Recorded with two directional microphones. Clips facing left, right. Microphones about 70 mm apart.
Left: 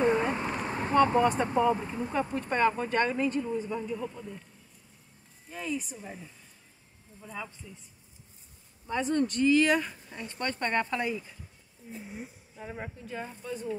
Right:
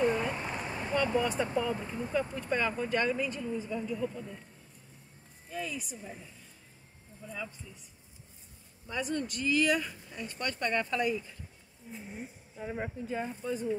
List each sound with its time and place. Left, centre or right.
0.0 s vehicle: left
0.5 s vehicle: left
1.6 s speech: left
2.3 s speech: left
3.7 s speech: left
5.5 s speech: left
8.8 s speech: left
12.1 s speech: centre
12.6 s speech: centre